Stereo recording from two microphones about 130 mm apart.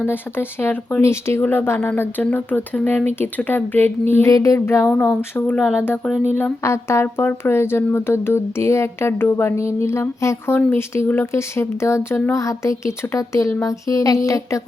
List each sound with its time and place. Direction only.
0.0 s speech: 15° left (ahead or behind)
4.9 s speech: 10° left (ahead or behind); by 14.6 s 25° left (ahead or behind)